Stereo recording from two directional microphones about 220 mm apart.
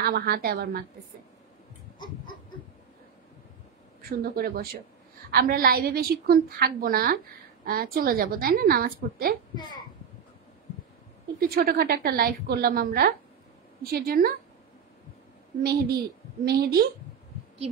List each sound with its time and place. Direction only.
0.0 s a woman's voice: 45° right (ahead or behind)
4.0 s a woman's voice: 45° right (ahead or behind)
9.6 s a child's voice: 20° left (ahead or behind)
11.3 s a woman's voice: 45° right (ahead or behind)
15.6 s a woman's voice: 45° right (ahead or behind)